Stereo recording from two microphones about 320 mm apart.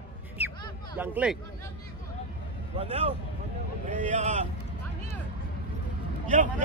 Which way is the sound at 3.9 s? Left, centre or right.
Right.